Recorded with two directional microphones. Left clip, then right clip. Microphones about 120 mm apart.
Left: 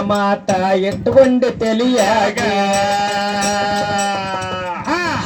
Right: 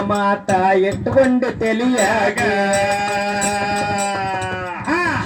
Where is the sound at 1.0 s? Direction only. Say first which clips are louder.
Left 4 dB; 25° left (ahead or behind).